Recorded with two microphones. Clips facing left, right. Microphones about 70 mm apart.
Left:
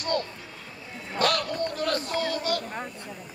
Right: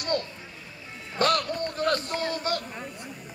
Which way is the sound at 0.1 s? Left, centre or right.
Right.